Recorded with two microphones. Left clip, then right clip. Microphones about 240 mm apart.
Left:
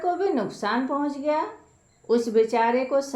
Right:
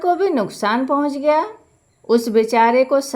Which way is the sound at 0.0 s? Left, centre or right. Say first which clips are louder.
Right 7 dB; right.